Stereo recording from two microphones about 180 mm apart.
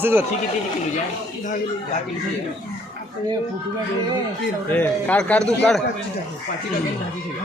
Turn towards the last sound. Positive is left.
turn(degrees=5)  # may be behind; listen again after turning